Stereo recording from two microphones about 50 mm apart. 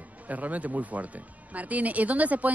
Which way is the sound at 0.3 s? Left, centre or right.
Right.